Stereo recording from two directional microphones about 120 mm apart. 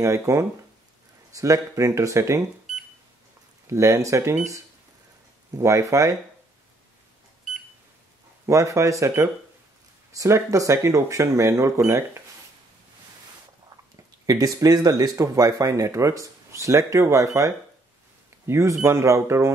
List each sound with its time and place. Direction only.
0.0 s speech: 25° right (ahead or behind)
3.6 s speech: 25° right (ahead or behind)
5.6 s speech: 25° right (ahead or behind)
8.5 s speech: 25° right (ahead or behind)
14.2 s speech: 30° right (ahead or behind)